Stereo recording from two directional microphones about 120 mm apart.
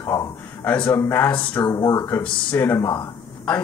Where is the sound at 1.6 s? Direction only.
30° left (ahead or behind).